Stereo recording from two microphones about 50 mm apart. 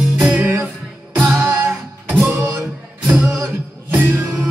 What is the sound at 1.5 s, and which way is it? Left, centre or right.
Music, right.